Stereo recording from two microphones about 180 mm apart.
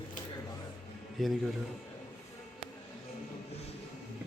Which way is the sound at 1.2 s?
Centre (ahead or behind).